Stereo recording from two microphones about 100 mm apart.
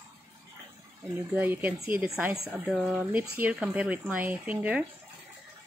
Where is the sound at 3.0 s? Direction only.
15° right (ahead or behind).